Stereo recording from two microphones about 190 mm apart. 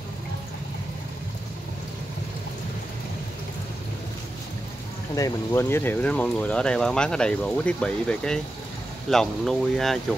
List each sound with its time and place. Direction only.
5.1 s speech: 15° left (ahead or behind)